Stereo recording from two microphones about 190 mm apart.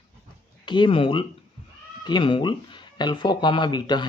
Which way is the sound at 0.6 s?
25° left (ahead or behind).